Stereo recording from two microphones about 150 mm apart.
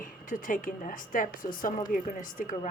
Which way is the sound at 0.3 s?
60° left (ahead or behind).